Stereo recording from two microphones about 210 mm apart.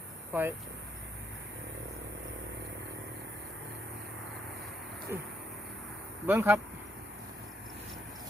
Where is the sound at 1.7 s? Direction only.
55° right (ahead or behind).